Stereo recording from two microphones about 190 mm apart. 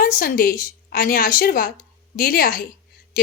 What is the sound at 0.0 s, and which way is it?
A woman's voice, 50° left (ahead or behind).